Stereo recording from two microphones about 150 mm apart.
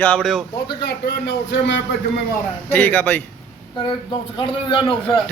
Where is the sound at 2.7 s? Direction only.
10° left (ahead or behind).